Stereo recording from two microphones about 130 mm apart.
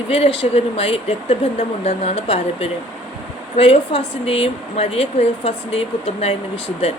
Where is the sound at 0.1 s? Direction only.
50° left (ahead or behind).